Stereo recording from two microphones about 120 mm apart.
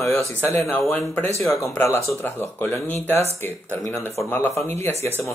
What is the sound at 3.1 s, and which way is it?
Speech, 60° right (ahead or behind).